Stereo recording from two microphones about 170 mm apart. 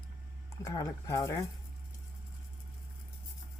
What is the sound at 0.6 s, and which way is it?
Speech, 20° left (ahead or behind).